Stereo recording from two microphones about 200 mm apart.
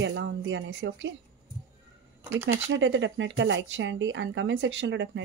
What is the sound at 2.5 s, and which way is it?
Speech, 70° right (ahead or behind).